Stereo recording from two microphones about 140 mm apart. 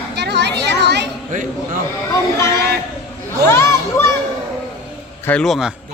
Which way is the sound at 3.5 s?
20° left (ahead or behind).